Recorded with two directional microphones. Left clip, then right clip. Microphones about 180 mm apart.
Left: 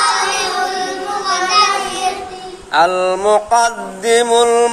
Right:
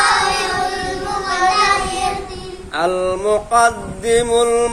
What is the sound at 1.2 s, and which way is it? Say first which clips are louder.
Child singing: left 2 dB; centre (ahead or behind).